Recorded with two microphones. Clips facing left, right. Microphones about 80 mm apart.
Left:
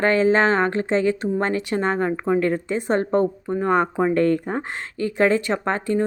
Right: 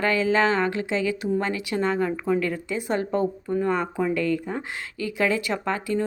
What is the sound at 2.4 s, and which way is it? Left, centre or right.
Speech, left.